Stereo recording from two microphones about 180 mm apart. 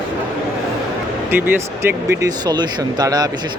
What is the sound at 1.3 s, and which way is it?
A man's voice, 10° right (ahead or behind).